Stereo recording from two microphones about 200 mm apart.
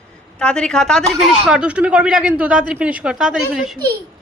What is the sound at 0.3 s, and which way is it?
Speech, 5° left (ahead or behind).